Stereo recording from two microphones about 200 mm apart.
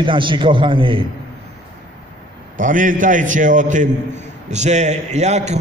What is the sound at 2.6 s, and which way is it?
A man's voice, 40° right (ahead or behind).